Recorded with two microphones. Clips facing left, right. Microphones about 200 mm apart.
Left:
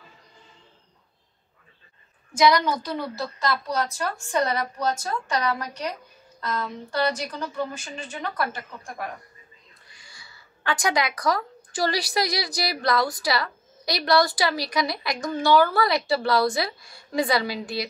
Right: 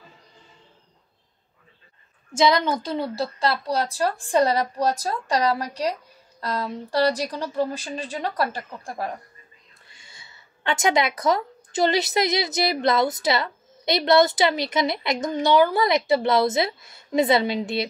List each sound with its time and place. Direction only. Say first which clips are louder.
2.3 s a woman's voice: even; 25° right (ahead or behind)